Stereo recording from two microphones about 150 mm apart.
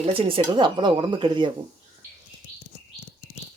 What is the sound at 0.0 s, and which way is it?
Speech, 35° right (ahead or behind).